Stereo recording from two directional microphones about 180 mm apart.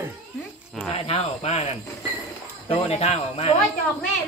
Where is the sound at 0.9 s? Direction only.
35° left (ahead or behind).